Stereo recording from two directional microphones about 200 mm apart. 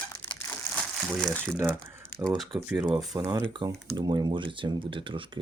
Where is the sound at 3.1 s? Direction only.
15° right (ahead or behind).